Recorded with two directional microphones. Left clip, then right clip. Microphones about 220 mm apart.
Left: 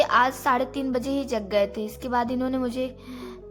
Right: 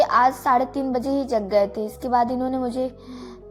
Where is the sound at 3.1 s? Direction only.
20° left (ahead or behind).